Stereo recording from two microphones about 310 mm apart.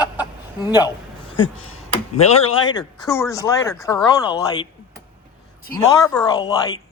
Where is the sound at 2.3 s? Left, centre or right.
Centre.